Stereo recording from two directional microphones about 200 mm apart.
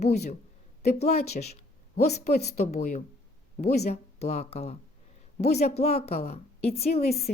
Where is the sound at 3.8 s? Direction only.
30° left (ahead or behind).